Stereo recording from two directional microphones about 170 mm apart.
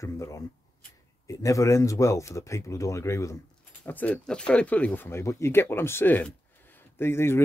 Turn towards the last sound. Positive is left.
turn(degrees=15)  # may be behind; listen again after turning